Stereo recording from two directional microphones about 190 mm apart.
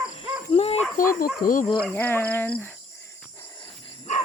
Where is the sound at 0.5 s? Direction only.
30° left (ahead or behind).